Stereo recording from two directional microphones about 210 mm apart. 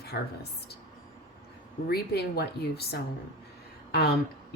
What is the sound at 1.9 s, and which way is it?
Speech, 50° left (ahead or behind).